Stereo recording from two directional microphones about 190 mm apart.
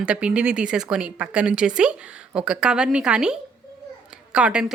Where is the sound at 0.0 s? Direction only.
5° right (ahead or behind).